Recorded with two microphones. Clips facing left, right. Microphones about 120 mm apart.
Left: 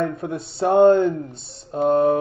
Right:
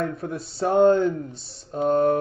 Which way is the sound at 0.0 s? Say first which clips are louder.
Left 3 dB; centre (ahead or behind).